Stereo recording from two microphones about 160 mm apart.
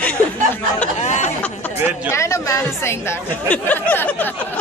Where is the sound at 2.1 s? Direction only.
20° left (ahead or behind).